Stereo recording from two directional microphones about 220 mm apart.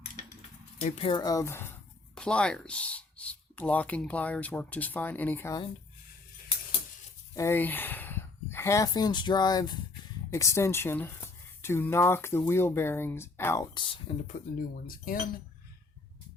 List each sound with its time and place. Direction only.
0.8 s speech: 30° left (ahead or behind)
1.1 s speech: 15° left (ahead or behind)
7.3 s speech: 10° left (ahead or behind)
14.8 s speech: 40° left (ahead or behind)